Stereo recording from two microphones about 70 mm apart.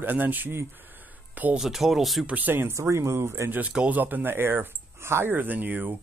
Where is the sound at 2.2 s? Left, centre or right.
Right.